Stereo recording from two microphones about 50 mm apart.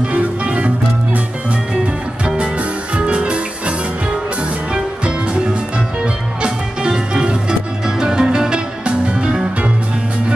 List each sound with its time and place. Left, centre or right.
0.0 s music: right
2.2 s music: right
4.7 s music: centre